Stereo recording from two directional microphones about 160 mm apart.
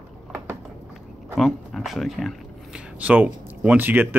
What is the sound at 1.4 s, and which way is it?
Speech, centre (ahead or behind).